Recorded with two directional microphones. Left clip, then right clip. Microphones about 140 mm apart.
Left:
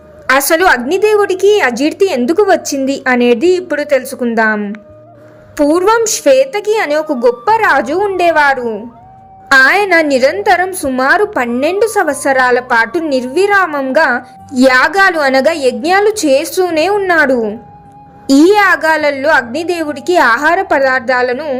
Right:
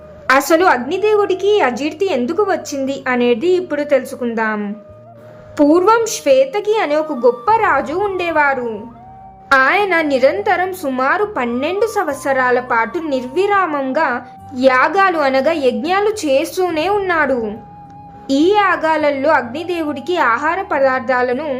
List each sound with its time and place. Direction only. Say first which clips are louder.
0.3 s a woman's voice: left 3 dB; 30° left (ahead or behind)
5.5 s a woman's voice: left 2 dB; 25° left (ahead or behind)
13.7 s a woman's voice: left 3 dB; 5° left (ahead or behind)
13.9 s a woman's voice: left 6 dB; 25° left (ahead or behind)